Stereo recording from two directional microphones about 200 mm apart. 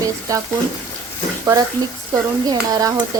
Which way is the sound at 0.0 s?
15° right (ahead or behind).